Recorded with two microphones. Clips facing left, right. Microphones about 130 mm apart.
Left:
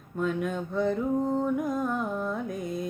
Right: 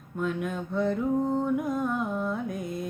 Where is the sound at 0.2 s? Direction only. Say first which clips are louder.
Left 1 dB; centre (ahead or behind).